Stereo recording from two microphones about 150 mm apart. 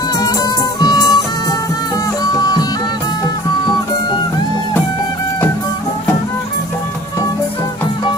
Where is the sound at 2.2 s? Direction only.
25° left (ahead or behind).